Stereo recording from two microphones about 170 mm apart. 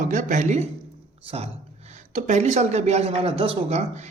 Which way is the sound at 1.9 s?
45° right (ahead or behind).